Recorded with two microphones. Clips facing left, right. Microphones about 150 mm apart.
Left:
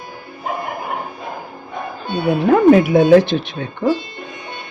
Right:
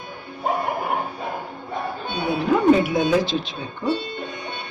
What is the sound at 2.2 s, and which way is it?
Speech, 80° left.